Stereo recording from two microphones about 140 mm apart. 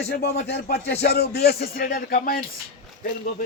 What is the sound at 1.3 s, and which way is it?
Speech, 90° left.